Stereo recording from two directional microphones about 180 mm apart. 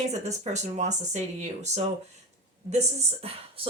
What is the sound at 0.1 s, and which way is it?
Speech, 40° right (ahead or behind).